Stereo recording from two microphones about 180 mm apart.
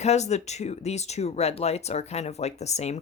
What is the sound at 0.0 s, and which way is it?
Speech, 40° left (ahead or behind).